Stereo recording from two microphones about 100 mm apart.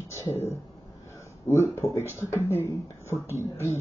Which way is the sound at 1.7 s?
25° left (ahead or behind).